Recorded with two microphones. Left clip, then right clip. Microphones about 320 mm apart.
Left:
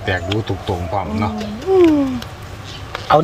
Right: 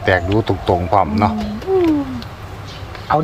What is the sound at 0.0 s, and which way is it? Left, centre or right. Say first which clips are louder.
Speech: right 5 dB; centre.